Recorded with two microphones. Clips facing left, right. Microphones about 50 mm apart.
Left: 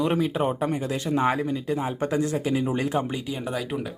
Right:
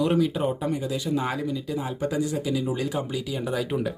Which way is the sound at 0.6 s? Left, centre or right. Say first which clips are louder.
Left 1 dB; left.